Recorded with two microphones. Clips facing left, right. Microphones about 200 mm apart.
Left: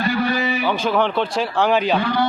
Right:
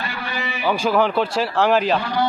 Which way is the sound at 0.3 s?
40° left (ahead or behind).